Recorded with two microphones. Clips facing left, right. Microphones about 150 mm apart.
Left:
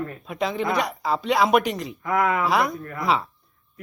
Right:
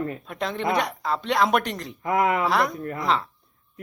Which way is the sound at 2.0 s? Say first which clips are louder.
Right 1 dB; 25° right (ahead or behind).